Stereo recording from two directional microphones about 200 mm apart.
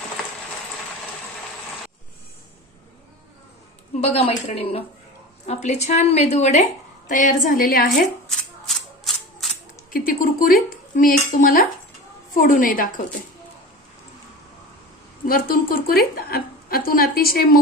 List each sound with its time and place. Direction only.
4.0 s speech: 30° left (ahead or behind)
8.3 s a sound: centre (ahead or behind)
9.9 s a woman's voice: 45° left (ahead or behind)
15.3 s a woman's voice: 45° left (ahead or behind)